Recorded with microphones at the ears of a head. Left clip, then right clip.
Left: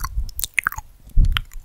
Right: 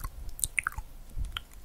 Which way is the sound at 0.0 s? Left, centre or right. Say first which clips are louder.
Left 10 dB; left.